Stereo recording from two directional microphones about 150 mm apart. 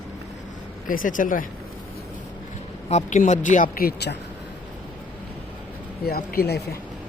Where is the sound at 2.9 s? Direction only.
55° left (ahead or behind); by 4.2 s 85° left.